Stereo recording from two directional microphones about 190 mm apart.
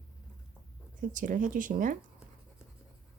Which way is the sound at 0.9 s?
45° right (ahead or behind).